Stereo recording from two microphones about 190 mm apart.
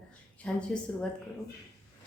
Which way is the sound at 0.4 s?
5° left (ahead or behind).